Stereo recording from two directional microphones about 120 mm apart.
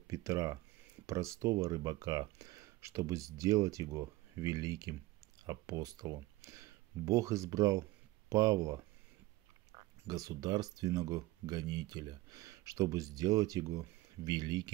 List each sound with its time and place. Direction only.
0.1 s speech: 25° right (ahead or behind)